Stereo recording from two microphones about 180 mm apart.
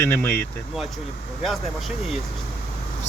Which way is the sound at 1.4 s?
Centre (ahead or behind).